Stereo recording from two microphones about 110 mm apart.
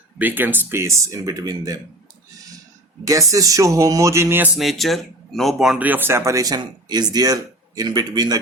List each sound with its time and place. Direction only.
0.2 s speech: 15° right (ahead or behind); by 1.8 s 35° right (ahead or behind)
3.0 s speech: 30° right (ahead or behind)
4.5 s speech: centre (ahead or behind)
5.8 s speech: 15° right (ahead or behind); by 8.4 s 35° right (ahead or behind)